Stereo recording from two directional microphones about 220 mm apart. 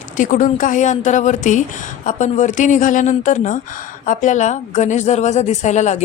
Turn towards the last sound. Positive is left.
turn(degrees=30)  # may be behind; listen again after turning